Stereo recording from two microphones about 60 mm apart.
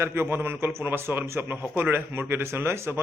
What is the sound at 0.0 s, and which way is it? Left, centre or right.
A man's voice, right.